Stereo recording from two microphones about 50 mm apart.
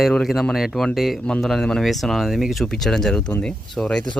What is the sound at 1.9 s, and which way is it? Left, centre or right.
Speech, centre.